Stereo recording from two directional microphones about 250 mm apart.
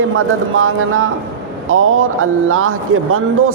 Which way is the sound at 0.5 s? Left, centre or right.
Right.